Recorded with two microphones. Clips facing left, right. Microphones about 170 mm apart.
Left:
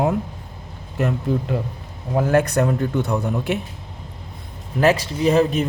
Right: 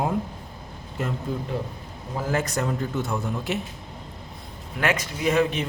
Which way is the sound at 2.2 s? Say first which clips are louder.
Left 8 dB; 65° left (ahead or behind).